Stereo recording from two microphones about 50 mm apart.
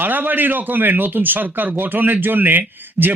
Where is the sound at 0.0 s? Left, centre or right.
Right.